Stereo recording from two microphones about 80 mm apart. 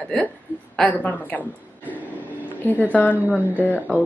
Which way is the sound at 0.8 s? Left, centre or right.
Centre.